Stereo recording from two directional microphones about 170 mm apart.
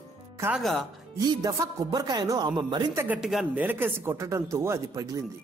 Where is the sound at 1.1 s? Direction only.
20° right (ahead or behind).